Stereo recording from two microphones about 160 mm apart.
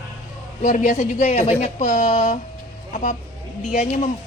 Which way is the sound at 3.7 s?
50° left (ahead or behind).